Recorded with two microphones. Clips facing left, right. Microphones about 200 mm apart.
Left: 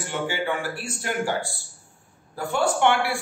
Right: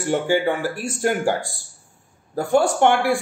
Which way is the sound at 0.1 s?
45° right (ahead or behind).